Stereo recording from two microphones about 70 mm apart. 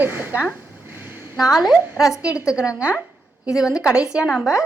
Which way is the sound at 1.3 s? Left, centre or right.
Centre.